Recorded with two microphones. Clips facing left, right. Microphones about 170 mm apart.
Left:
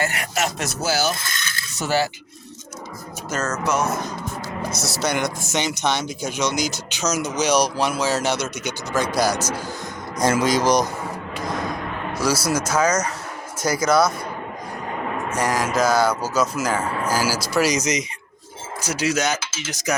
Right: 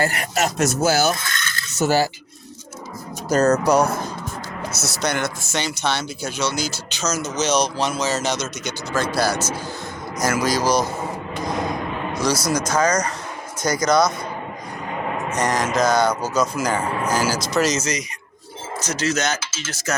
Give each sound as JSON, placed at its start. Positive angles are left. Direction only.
{"t": 0.0, "sound": "speech", "side_deg": -35}
{"t": 3.2, "sound": "speech", "side_deg": -35}
{"t": 4.7, "sound": "speech", "side_deg": 0}
{"t": 10.2, "sound": "speech", "side_deg": 30}
{"t": 11.4, "sound": "a sound", "side_deg": 0}
{"t": 12.1, "sound": "speech", "side_deg": 5}
{"t": 15.4, "sound": "speech", "side_deg": 5}